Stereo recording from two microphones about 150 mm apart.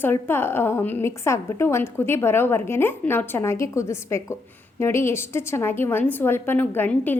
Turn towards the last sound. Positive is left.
turn(degrees=10)  # may be behind; listen again after turning